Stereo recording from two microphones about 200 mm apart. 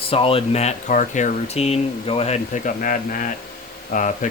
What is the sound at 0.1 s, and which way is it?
Speech, 25° left (ahead or behind).